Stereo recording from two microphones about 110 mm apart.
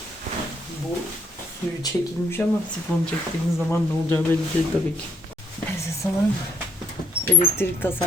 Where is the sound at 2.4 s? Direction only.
15° left (ahead or behind).